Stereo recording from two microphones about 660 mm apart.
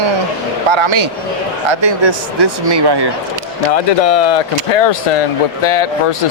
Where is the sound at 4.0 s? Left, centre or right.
Left.